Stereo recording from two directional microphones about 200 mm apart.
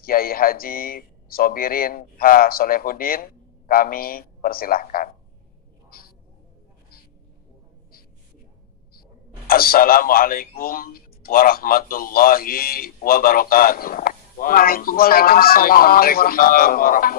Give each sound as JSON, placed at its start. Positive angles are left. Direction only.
{"t": 0.0, "sound": "speech", "side_deg": 45}
{"t": 9.5, "sound": "speech", "side_deg": 45}